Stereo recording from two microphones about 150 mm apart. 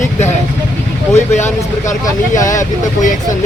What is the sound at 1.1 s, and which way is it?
Speech, 50° left (ahead or behind).